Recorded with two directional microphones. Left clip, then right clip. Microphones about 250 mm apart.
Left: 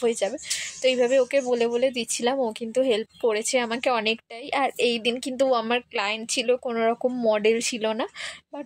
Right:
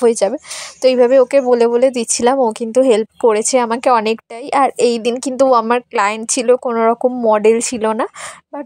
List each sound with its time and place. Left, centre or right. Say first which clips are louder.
0.0 s speech: right 11 dB; right